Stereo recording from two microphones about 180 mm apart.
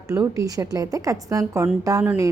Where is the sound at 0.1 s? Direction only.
20° right (ahead or behind).